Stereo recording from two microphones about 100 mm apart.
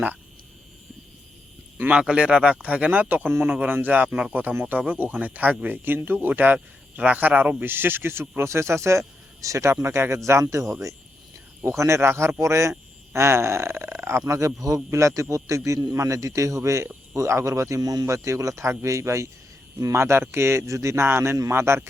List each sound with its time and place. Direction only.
1.9 s speech: 10° right (ahead or behind)